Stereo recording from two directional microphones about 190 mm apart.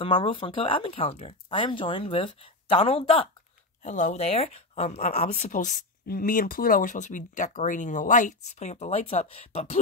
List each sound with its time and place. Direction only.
0.0 s speech: 30° left (ahead or behind)